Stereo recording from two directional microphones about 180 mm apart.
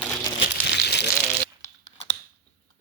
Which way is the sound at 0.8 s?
70° left (ahead or behind).